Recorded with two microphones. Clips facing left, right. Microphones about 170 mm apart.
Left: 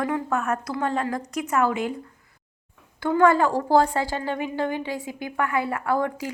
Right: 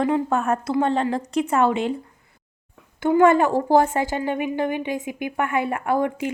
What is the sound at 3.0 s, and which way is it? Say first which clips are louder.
A woman's voice: right 3 dB; 20° right (ahead or behind).